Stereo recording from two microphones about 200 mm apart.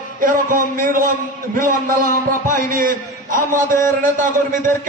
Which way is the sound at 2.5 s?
45° right (ahead or behind).